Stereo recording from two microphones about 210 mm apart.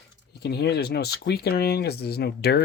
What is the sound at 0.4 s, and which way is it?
Speech, 50° left (ahead or behind).